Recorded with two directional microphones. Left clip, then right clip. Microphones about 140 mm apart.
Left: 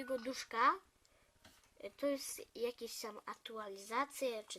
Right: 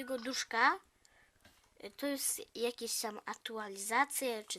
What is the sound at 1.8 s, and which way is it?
Speech, 30° right (ahead or behind).